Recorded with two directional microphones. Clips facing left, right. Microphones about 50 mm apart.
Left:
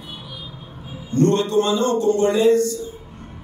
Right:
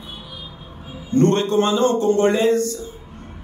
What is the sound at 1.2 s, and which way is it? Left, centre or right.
A man's voice, right.